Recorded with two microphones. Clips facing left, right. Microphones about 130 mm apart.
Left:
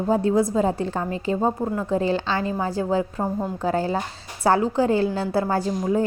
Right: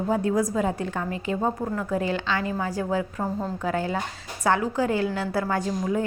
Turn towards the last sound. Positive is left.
turn(degrees=30)  # may be behind; listen again after turning